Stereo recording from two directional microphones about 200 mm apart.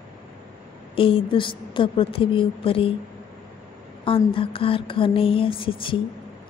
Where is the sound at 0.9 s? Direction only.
25° left (ahead or behind).